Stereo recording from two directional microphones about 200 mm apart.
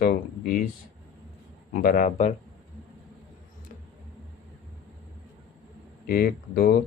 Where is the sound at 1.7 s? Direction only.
45° left (ahead or behind).